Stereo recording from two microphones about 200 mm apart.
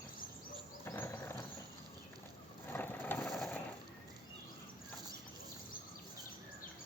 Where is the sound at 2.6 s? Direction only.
10° left (ahead or behind).